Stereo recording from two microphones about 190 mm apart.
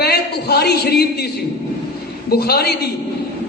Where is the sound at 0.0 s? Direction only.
55° left (ahead or behind).